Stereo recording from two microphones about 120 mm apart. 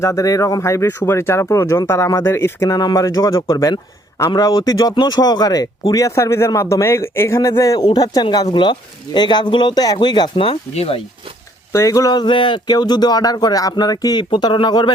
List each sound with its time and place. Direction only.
0.0 s speech: 25° left (ahead or behind); by 11.0 s 55° left (ahead or behind)
11.7 s speech: 25° left (ahead or behind)